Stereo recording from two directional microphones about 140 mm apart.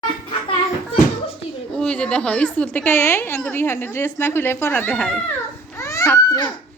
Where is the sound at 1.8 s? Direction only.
5° left (ahead or behind).